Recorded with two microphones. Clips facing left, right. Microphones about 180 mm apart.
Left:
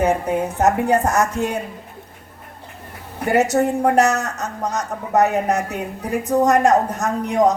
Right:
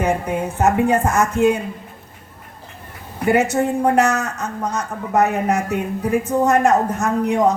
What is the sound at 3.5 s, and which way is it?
A woman's voice, 40° left (ahead or behind).